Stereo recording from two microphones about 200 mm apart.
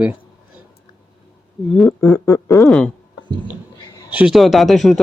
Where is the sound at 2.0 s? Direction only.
15° left (ahead or behind).